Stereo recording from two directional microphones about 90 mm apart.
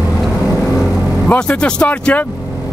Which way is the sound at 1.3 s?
15° left (ahead or behind).